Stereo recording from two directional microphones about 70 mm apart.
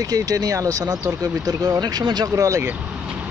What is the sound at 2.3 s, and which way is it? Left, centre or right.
Speech, right.